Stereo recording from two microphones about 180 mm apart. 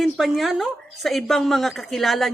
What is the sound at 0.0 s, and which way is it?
Speech, centre (ahead or behind).